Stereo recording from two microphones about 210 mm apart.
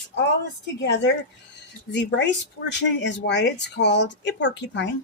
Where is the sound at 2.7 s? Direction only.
55° left (ahead or behind).